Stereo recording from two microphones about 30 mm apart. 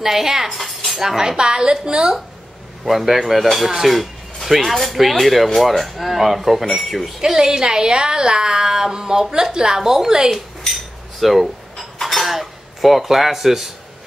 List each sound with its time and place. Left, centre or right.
0.0 s speech: centre
0.6 s cutlery: centre
1.0 s a woman's voice: centre
2.8 s speech: centre
3.9 s a sound: centre
4.7 s speech: centre
7.2 s a woman's voice: centre
11.1 s cutlery: centre
12.3 s speech: centre